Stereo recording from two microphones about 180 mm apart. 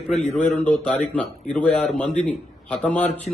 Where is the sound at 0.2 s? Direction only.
10° left (ahead or behind).